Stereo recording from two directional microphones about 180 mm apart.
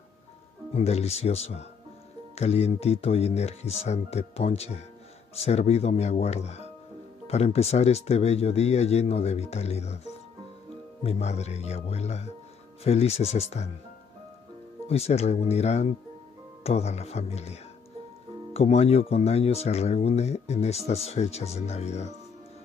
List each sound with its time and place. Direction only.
0.7 s speech: 35° left (ahead or behind)
11.1 s speech: 35° left (ahead or behind)
14.9 s speech: 35° left (ahead or behind)